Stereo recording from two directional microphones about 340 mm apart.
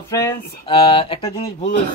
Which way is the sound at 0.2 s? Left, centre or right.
Centre.